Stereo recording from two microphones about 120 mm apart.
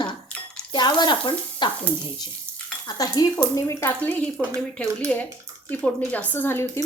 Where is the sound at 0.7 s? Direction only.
40° left (ahead or behind).